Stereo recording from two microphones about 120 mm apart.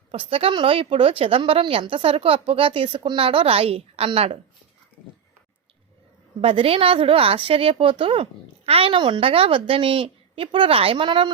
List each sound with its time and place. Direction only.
0.1 s a woman's voice: 50° right (ahead or behind)
6.4 s a woman's voice: 50° right (ahead or behind)